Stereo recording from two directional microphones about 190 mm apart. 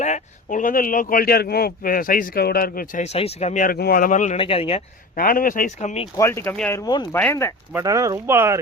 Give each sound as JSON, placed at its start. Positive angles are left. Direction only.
{"t": 0.0, "sound": "speech", "side_deg": 40}
{"t": 4.4, "sound": "speech", "side_deg": 30}
{"t": 5.1, "sound": "speech", "side_deg": 50}
{"t": 5.8, "sound": "speech", "side_deg": 35}
{"t": 6.1, "sound": "speech", "side_deg": 15}
{"t": 7.7, "sound": "speech", "side_deg": -15}